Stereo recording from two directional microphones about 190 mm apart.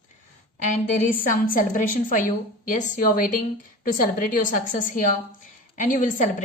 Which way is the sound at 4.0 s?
45° left (ahead or behind).